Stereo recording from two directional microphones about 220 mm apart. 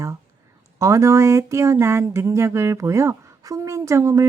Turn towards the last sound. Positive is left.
turn(degrees=-15)  # may be behind; listen again after turning